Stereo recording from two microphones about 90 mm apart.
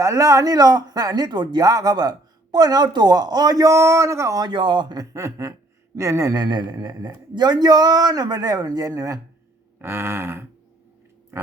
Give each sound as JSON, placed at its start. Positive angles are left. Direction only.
{"t": 0.0, "sound": "speech", "side_deg": -40}
{"t": 4.4, "sound": "speech", "side_deg": -60}
{"t": 4.9, "sound": "speech", "side_deg": -35}
{"t": 9.7, "sound": "a sound", "side_deg": -30}